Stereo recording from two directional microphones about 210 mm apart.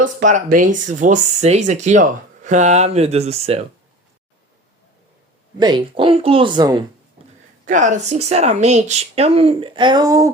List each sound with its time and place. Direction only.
0.0 s speech: 35° right (ahead or behind)
5.5 s speech: 20° right (ahead or behind)
7.6 s speech: 35° right (ahead or behind); by 10.3 s 15° right (ahead or behind)